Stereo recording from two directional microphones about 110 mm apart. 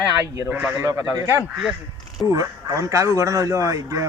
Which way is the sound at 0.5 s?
15° right (ahead or behind).